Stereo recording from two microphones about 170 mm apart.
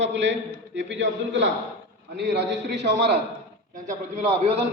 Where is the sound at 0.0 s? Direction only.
90° right.